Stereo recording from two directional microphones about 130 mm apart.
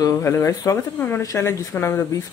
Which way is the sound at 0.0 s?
20° left (ahead or behind).